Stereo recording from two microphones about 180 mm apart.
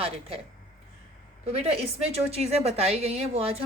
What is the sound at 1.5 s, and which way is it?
A woman's voice, 35° right (ahead or behind).